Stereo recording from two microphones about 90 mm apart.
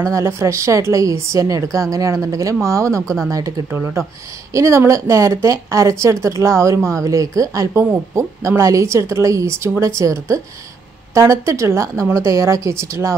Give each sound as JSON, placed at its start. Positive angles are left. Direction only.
{"t": 0.1, "sound": "a woman's voice", "side_deg": -30}
{"t": 3.7, "sound": "speech", "side_deg": -20}
{"t": 4.6, "sound": "a woman's voice", "side_deg": -30}